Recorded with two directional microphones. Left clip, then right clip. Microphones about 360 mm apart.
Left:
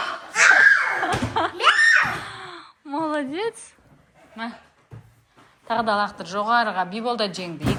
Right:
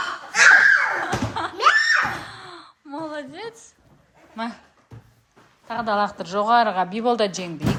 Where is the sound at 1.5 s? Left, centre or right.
Centre.